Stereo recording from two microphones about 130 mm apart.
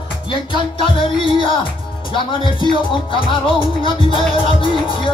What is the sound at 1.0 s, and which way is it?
Music, 40° left (ahead or behind).